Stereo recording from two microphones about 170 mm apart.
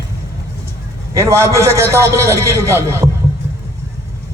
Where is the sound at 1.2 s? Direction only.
15° right (ahead or behind).